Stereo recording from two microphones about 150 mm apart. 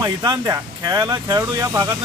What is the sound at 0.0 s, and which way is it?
Speech, 25° right (ahead or behind).